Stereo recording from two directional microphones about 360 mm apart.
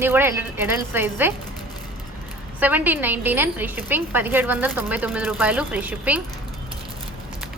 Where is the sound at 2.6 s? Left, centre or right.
Centre.